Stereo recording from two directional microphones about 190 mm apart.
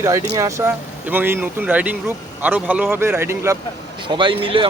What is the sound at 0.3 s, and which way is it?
Speech, 15° right (ahead or behind).